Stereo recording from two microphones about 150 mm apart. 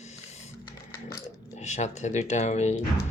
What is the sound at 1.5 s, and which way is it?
Speech, 50° left (ahead or behind).